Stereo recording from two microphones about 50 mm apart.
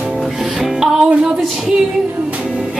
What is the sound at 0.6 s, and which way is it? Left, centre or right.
Music, centre.